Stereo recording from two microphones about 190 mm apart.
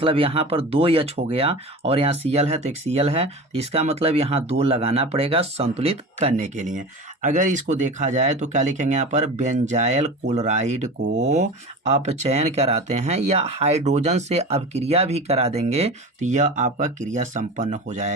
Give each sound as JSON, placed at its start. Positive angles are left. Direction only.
{"t": 0.0, "sound": "speech", "side_deg": -30}